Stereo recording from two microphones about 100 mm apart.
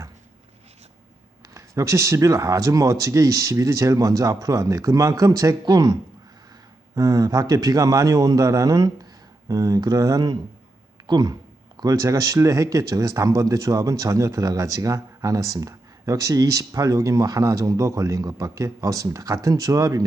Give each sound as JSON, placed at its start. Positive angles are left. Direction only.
{"t": 1.5, "sound": "speech", "side_deg": -30}